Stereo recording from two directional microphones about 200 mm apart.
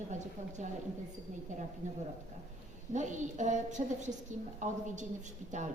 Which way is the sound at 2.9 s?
35° right (ahead or behind).